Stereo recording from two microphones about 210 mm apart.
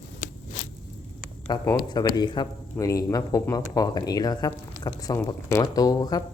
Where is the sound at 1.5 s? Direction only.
20° left (ahead or behind).